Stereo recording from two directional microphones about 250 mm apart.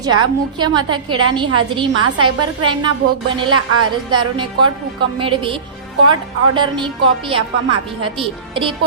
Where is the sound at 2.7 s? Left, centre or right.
Centre.